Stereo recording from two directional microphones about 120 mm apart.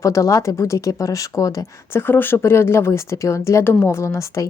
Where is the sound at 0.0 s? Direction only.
25° left (ahead or behind).